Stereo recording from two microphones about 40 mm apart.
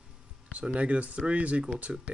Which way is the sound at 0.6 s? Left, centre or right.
Right.